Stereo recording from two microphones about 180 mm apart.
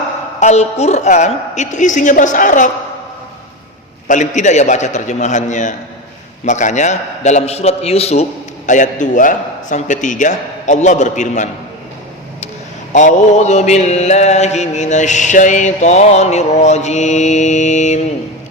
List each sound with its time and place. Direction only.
0.3 s a woman's voice: 40° left (ahead or behind)
4.1 s a woman's voice: 40° left (ahead or behind)
6.4 s mantra: 40° left (ahead or behind)
12.9 s mantra: 40° left (ahead or behind)